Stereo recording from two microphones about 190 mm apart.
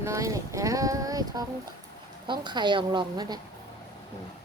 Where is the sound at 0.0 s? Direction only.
15° right (ahead or behind).